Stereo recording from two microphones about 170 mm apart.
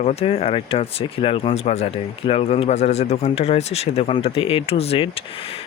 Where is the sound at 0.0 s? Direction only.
40° left (ahead or behind).